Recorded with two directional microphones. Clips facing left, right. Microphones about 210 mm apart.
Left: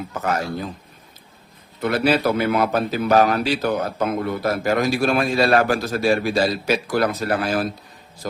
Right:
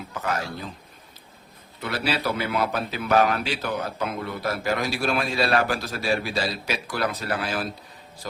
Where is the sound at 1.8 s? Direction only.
50° left (ahead or behind).